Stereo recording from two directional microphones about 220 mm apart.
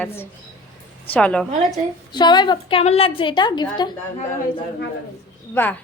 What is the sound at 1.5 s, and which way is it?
Speech, 30° right (ahead or behind).